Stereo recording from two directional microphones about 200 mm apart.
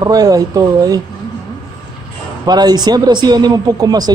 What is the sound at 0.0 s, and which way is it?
A man's voice, 20° right (ahead or behind).